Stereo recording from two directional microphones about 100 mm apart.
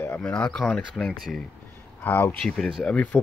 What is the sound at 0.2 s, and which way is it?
Speech, 10° left (ahead or behind).